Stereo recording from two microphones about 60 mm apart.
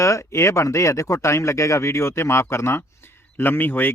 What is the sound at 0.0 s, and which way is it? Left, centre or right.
Speech, left.